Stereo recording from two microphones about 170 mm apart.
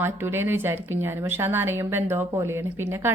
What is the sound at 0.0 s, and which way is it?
A woman's voice, 15° right (ahead or behind).